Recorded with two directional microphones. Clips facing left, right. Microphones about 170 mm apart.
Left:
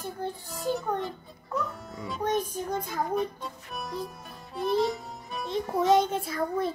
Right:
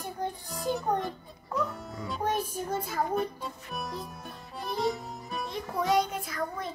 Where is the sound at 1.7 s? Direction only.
Centre (ahead or behind).